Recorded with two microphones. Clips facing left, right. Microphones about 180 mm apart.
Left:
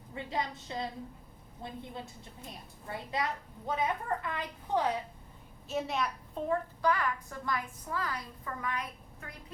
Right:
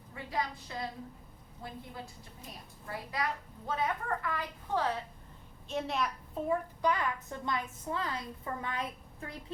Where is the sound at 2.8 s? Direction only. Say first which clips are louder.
Left 1 dB; 25° left (ahead or behind).